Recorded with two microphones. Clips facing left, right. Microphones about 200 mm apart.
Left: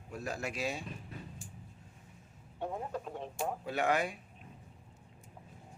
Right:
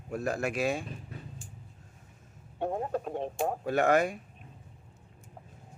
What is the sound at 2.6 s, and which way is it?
Speech, 50° right (ahead or behind).